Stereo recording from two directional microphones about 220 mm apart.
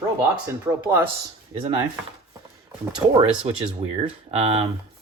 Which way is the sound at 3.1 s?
25° right (ahead or behind).